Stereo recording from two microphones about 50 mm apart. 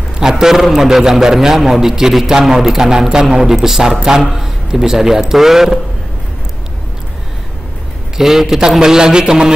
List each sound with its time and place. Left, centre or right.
0.2 s a man's voice: centre
8.2 s a man's voice: centre